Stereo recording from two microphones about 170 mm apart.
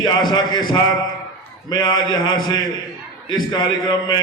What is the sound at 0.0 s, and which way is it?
A man's voice, 25° left (ahead or behind).